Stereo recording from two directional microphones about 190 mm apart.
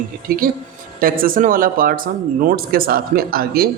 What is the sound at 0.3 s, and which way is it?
Speech, 50° right (ahead or behind).